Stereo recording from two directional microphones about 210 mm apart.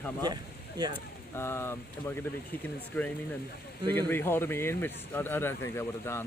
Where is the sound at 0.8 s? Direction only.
20° right (ahead or behind).